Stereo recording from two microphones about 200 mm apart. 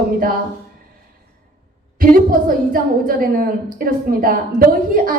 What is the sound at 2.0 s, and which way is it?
A woman's voice, 45° right (ahead or behind).